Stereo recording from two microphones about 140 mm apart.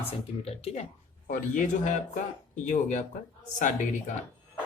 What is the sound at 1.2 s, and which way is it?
Speech, 65° left (ahead or behind).